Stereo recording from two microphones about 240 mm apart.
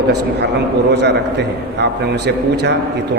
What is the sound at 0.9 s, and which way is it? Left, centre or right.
A man's voice, right.